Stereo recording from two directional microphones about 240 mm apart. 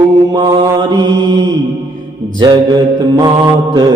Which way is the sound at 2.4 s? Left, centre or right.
Centre.